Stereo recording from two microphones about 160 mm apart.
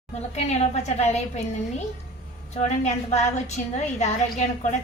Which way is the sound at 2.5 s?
40° left (ahead or behind).